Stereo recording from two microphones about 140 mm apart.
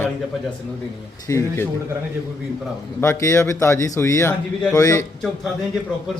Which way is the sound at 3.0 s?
20° left (ahead or behind).